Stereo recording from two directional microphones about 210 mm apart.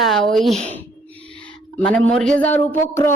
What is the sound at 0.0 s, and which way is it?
Speech, centre (ahead or behind).